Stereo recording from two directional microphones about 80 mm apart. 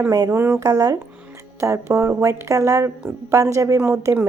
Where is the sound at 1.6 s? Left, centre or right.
Right.